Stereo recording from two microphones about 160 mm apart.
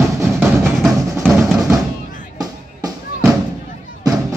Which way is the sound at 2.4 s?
25° right (ahead or behind).